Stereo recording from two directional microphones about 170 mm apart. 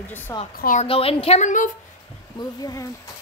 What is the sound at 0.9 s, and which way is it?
Speech, 35° left (ahead or behind).